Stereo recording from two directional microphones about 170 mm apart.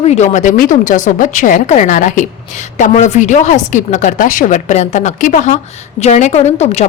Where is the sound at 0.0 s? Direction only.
40° left (ahead or behind).